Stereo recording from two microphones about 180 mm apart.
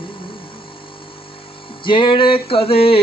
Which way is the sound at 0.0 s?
30° left (ahead or behind).